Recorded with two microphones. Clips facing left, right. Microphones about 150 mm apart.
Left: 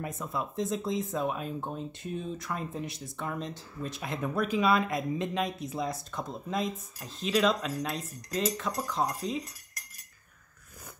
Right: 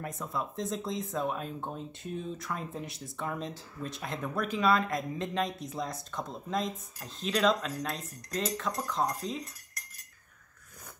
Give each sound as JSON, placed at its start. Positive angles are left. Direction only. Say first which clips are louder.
{"t": 0.0, "sound": "speech", "louder": "left 1 dB", "side_deg": 5}